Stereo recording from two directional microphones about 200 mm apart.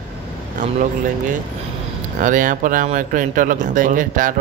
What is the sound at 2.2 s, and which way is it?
A man's voice, 40° right (ahead or behind).